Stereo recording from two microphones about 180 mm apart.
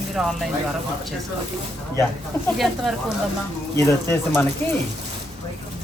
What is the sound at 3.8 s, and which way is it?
Speech, 15° left (ahead or behind).